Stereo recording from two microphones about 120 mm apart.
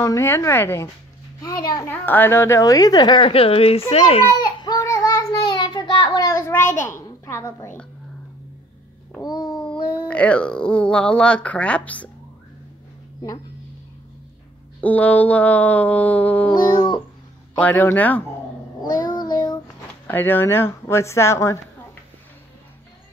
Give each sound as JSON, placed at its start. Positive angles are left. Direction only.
{"t": 0.0, "sound": "speech", "side_deg": 25}
{"t": 1.4, "sound": "a woman's voice", "side_deg": 30}
{"t": 1.9, "sound": "a woman's voice", "side_deg": 15}
{"t": 4.3, "sound": "child singing", "side_deg": 35}
{"t": 5.5, "sound": "a sound", "side_deg": 40}
{"t": 9.2, "sound": "babbling", "side_deg": 30}
{"t": 9.5, "sound": "babbling", "side_deg": 5}
{"t": 9.8, "sound": "cat", "side_deg": 35}
{"t": 10.0, "sound": "speech", "side_deg": 10}
{"t": 14.8, "sound": "speech", "side_deg": 15}
{"t": 16.5, "sound": "a woman's voice", "side_deg": 35}
{"t": 17.6, "sound": "speech", "side_deg": 15}
{"t": 18.8, "sound": "child singing", "side_deg": 35}
{"t": 20.1, "sound": "speech", "side_deg": 15}